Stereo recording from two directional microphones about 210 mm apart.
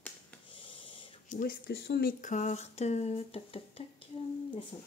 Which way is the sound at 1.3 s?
40° left (ahead or behind).